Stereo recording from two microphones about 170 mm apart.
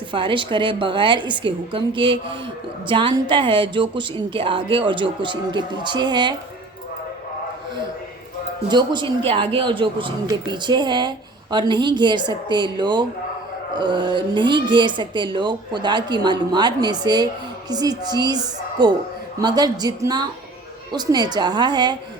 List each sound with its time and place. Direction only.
0.1 s speech: 30° right (ahead or behind)
8.7 s speech: 25° right (ahead or behind)